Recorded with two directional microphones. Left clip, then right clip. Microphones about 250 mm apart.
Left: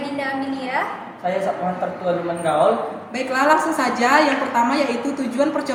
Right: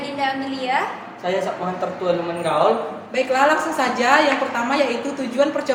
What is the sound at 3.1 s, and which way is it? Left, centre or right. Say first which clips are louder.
A woman's voice: right 1 dB; right.